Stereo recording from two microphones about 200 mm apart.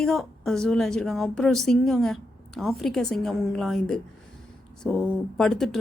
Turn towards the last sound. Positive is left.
turn(degrees=0)  # may be behind; listen again after turning